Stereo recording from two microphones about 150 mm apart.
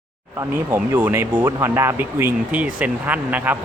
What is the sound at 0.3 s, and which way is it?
Speech, 20° right (ahead or behind).